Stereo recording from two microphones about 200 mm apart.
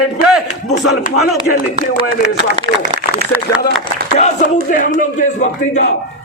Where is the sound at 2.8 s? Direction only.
40° right (ahead or behind).